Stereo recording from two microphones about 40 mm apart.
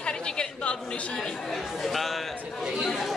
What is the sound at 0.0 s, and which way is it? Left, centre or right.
Chatter, left.